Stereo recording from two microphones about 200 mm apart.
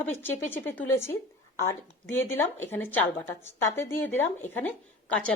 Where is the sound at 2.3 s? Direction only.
10° left (ahead or behind).